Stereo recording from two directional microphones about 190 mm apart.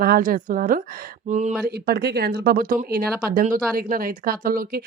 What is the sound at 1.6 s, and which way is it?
A woman's voice, 60° right (ahead or behind).